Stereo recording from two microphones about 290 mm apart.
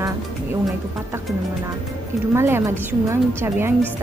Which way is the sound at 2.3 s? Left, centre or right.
Centre.